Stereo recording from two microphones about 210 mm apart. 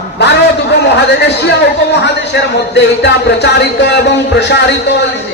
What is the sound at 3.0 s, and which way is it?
Speech, 55° left (ahead or behind).